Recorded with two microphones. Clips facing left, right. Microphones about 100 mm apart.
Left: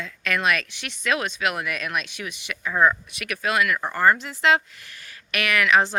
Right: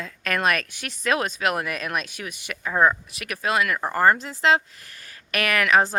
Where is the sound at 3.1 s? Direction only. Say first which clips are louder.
Even; 35° right (ahead or behind).